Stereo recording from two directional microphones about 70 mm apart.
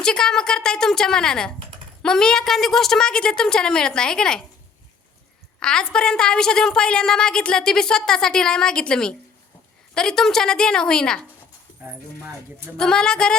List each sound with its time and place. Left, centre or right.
0.0 s a woman's voice: centre
5.5 s a woman's voice: centre
11.9 s speech: right
12.7 s a woman's voice: centre